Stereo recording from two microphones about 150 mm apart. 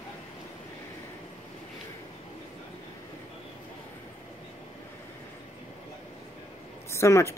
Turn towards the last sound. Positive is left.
turn(degrees=20)  # may be behind; listen again after turning